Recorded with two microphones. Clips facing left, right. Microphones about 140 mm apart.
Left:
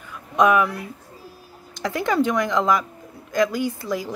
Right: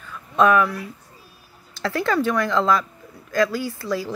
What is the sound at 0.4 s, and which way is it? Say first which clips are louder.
Speech: even; 15° left (ahead or behind).